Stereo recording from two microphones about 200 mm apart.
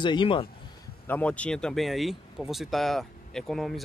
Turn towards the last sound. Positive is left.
turn(degrees=0)  # may be behind; listen again after turning